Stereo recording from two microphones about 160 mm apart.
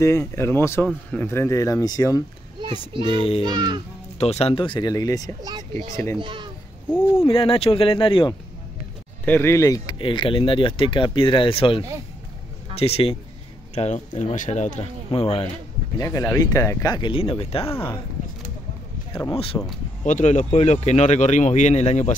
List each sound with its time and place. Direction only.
0.0 s speech: 20° left (ahead or behind)
2.9 s speech: 30° right (ahead or behind)
3.2 s speech: 35° left (ahead or behind)
3.4 s a child's voice: 25° right (ahead or behind)
4.2 s speech: 40° left (ahead or behind); by 5.3 s 20° left (ahead or behind)
5.4 s a child's voice: 25° right (ahead or behind)
7.2 s speech: 35° left (ahead or behind)
9.2 s speech: 15° left (ahead or behind); by 14.9 s 45° left (ahead or behind)
15.0 s speech: 35° left (ahead or behind)
16.0 s speech: 20° left (ahead or behind); by 17.9 s 35° left (ahead or behind)
19.1 s speech: 35° left (ahead or behind)
20.1 s speech: 50° left (ahead or behind)